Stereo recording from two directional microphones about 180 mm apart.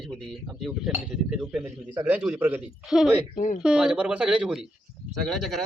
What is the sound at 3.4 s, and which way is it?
Speech, 45° left (ahead or behind).